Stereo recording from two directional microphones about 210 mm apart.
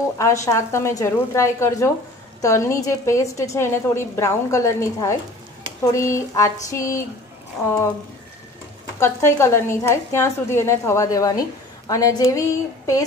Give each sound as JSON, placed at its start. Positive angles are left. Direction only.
{"t": 0.2, "sound": "a woman's voice", "side_deg": 15}
{"t": 9.0, "sound": "a woman's voice", "side_deg": 10}